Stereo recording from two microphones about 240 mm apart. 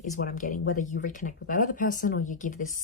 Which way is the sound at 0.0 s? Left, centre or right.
Left.